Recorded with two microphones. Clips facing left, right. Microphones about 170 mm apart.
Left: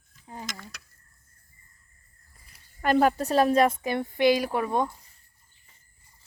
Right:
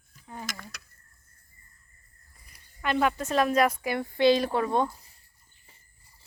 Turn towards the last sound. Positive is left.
turn(degrees=15)  # may be behind; listen again after turning